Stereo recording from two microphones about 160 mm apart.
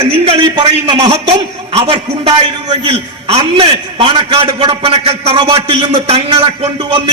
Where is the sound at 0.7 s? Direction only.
40° right (ahead or behind).